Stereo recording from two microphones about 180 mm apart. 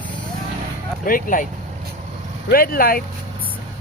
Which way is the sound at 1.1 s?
50° left (ahead or behind).